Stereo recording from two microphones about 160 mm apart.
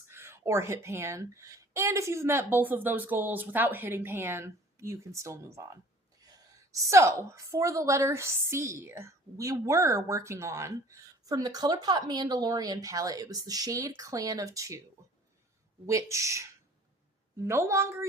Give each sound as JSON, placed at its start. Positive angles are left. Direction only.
{"t": 0.1, "sound": "a woman's voice", "side_deg": -15}
{"t": 15.9, "sound": "a woman's voice", "side_deg": -20}